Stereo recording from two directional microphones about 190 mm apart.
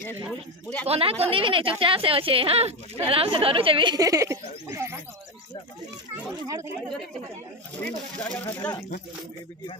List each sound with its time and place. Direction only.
0.3 s speech: 5° left (ahead or behind)
0.8 s speech: 30° right (ahead or behind); by 5.0 s 15° right (ahead or behind)
6.4 s speech: 15° right (ahead or behind)
8.2 s speech: 10° left (ahead or behind)